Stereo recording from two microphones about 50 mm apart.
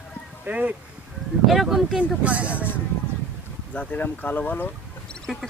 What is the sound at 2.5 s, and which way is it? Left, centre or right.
Speech, left.